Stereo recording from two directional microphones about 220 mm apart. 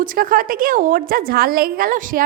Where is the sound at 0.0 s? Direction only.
40° right (ahead or behind).